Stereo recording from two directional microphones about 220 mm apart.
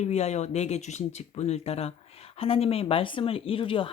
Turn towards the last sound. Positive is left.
turn(degrees=25)  # may be behind; listen again after turning